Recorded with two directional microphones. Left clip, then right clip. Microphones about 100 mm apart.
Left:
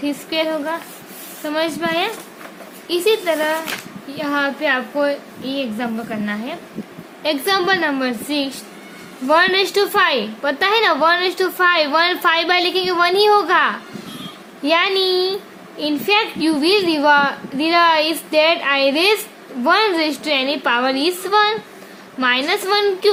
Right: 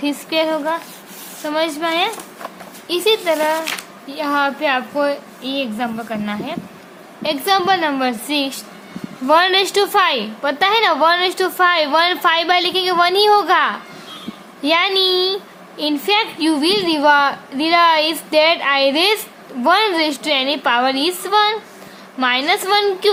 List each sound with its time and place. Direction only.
0.0 s a child's voice: 55° right (ahead or behind)
1.5 s a woman's voice: 35° right (ahead or behind)